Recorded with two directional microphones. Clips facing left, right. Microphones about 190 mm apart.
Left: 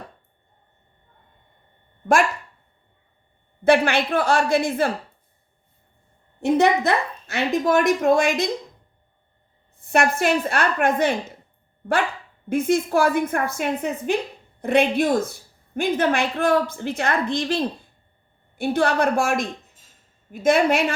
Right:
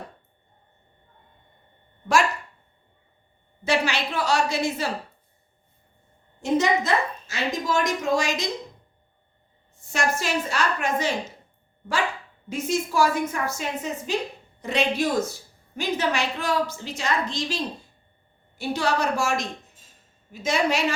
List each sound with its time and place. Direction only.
3.6 s a woman's voice: 55° left (ahead or behind)
6.4 s a woman's voice: 60° left (ahead or behind)
9.9 s a woman's voice: 60° left (ahead or behind)
12.5 s a woman's voice: 55° left (ahead or behind)